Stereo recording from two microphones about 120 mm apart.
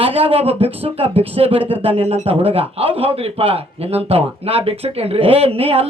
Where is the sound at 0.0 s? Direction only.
55° right (ahead or behind).